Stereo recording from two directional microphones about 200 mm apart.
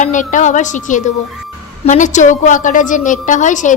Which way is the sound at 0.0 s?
40° left (ahead or behind).